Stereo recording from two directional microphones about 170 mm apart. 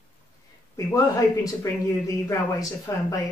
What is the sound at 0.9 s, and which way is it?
Speech, 20° left (ahead or behind).